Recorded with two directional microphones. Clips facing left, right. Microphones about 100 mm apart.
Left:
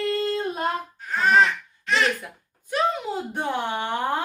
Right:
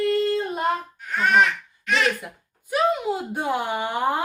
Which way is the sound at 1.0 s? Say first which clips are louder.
Left 1 dB; 35° left (ahead or behind).